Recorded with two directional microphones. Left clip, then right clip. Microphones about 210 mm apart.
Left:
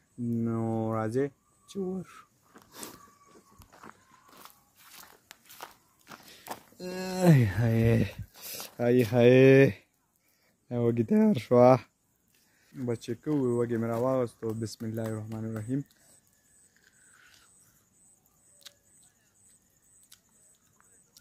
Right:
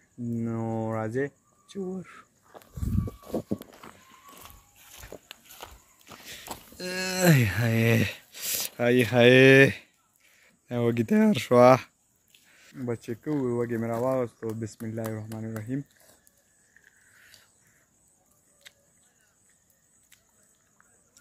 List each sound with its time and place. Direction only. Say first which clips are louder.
0.4 s a sound: even; 15° left (ahead or behind)
2.0 s speech: right 1 dB; 15° left (ahead or behind)
3.5 s walk: right 8 dB; 5° right (ahead or behind)
4.4 s a sound: right 3 dB; centre (ahead or behind)
5.6 s walk: right 1 dB; 10° left (ahead or behind)
10.4 s speech: right 2 dB; 5° left (ahead or behind)